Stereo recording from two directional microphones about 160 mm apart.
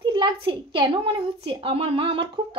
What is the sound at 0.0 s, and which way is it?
A child's voice, 30° right (ahead or behind).